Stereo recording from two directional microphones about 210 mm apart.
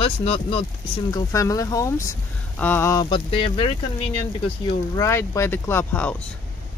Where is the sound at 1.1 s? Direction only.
15° left (ahead or behind).